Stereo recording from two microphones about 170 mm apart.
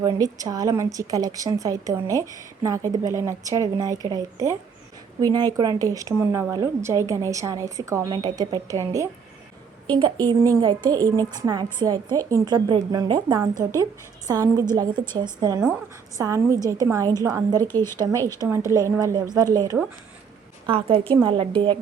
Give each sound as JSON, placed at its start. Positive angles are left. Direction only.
{"t": 0.0, "sound": "a woman's voice", "side_deg": -20}
{"t": 17.6, "sound": "speech", "side_deg": 15}
{"t": 17.9, "sound": "a woman's voice", "side_deg": -20}
{"t": 20.7, "sound": "a woman's voice", "side_deg": -30}